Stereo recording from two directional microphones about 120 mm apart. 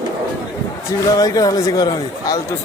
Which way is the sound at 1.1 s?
30° left (ahead or behind).